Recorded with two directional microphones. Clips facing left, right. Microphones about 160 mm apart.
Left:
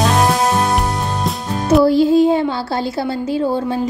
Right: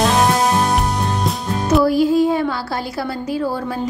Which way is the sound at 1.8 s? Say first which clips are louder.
Left 3 dB; 25° left (ahead or behind).